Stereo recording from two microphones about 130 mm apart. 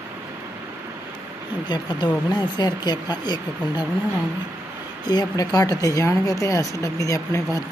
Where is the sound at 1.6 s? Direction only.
35° left (ahead or behind).